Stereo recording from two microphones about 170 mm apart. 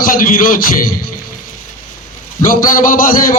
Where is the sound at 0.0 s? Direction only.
55° left (ahead or behind).